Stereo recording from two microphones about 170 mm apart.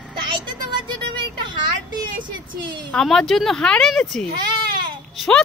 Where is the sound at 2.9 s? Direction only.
5° left (ahead or behind).